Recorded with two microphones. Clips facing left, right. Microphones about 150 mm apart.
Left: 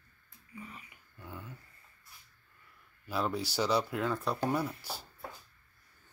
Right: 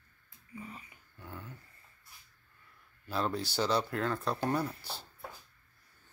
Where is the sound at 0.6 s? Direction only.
30° right (ahead or behind).